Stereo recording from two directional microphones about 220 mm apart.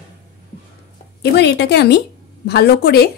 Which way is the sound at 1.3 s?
50° left (ahead or behind).